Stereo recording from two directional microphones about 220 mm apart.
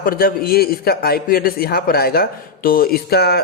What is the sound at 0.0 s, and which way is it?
A man's voice, 40° left (ahead or behind).